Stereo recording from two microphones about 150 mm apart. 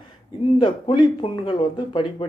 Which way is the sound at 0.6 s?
35° left (ahead or behind).